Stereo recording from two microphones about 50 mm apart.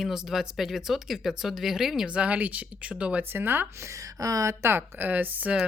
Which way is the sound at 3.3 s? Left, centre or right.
Right.